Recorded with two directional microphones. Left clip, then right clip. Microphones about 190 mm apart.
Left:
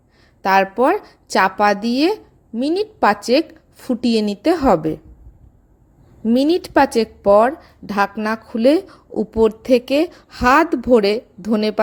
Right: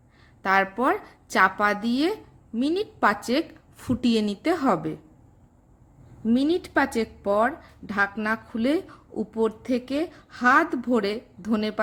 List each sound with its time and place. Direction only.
0.4 s speech: 25° left (ahead or behind)
6.3 s speech: 30° left (ahead or behind)